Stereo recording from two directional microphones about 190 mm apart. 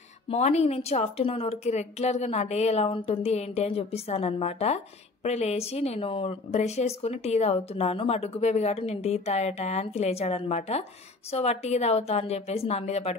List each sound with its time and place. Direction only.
0.3 s speech: 35° left (ahead or behind)